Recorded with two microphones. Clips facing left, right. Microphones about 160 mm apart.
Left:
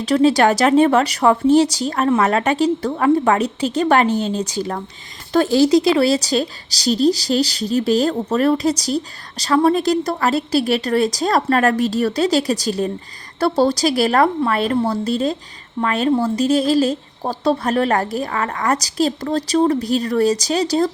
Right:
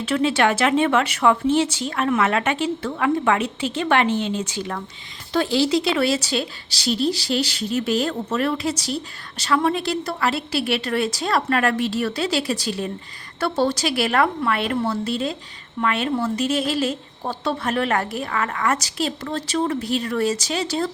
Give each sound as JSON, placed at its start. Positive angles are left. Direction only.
{"t": 0.0, "sound": "a woman's voice", "side_deg": 40}